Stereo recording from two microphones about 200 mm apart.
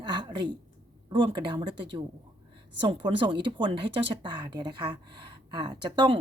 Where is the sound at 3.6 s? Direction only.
25° right (ahead or behind).